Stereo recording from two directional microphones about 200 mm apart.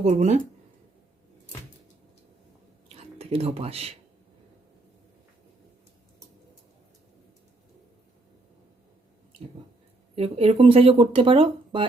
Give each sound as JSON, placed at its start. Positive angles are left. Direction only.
{"t": 0.0, "sound": "speech", "side_deg": -35}
{"t": 2.9, "sound": "speech", "side_deg": -30}
{"t": 10.2, "sound": "speech", "side_deg": -30}